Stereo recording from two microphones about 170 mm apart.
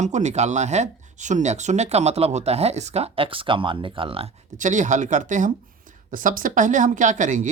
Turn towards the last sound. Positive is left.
turn(degrees=-50)  # may be behind; listen again after turning